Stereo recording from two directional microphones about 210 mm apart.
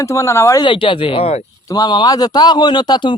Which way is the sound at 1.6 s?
20° left (ahead or behind).